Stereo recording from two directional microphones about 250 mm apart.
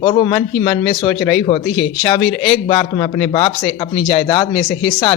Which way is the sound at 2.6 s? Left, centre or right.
Left.